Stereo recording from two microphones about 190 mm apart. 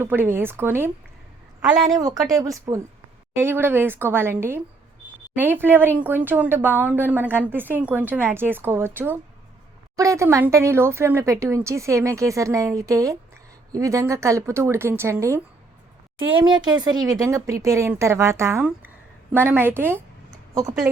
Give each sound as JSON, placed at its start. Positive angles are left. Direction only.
{"t": 0.0, "sound": "speech", "side_deg": -10}
{"t": 2.2, "sound": "speech", "side_deg": -20}
{"t": 16.1, "sound": "speech", "side_deg": -25}